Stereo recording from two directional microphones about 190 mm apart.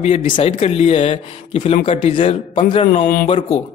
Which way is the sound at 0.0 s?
35° left (ahead or behind).